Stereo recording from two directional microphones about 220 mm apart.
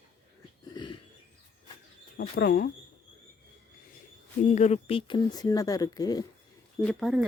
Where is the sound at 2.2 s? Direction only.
45° left (ahead or behind).